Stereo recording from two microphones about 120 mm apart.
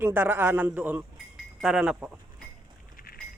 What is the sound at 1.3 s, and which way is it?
Sheep, 5° right (ahead or behind).